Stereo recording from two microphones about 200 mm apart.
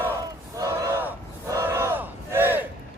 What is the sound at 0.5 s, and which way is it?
Battle cry, 15° right (ahead or behind).